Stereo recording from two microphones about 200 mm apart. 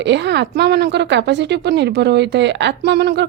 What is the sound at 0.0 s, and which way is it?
A woman's voice, 60° right (ahead or behind).